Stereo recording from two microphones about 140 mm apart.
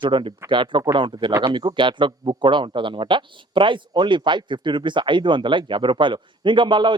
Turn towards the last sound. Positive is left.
turn(degrees=-35)  # may be behind; listen again after turning